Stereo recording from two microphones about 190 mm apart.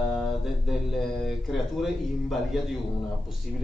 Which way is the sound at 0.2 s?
Centre (ahead or behind).